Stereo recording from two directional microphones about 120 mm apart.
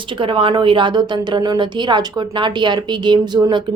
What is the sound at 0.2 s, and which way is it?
A woman's voice, 50° right (ahead or behind).